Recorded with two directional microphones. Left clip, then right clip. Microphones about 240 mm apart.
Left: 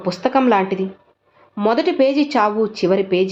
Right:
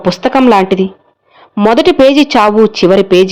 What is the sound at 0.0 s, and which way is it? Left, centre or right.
Speech, right.